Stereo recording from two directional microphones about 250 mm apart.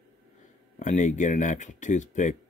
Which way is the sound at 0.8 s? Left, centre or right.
Left.